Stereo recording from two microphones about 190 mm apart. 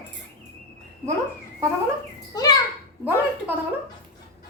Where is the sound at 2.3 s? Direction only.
20° left (ahead or behind).